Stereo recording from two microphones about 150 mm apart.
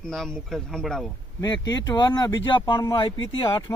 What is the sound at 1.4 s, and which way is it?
Speech, 30° left (ahead or behind).